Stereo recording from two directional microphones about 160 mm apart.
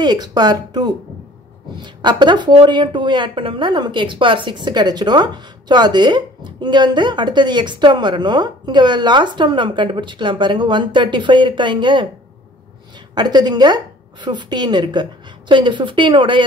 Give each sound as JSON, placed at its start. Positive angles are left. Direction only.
{"t": 0.0, "sound": "speech", "side_deg": -25}
{"t": 13.1, "sound": "speech", "side_deg": -25}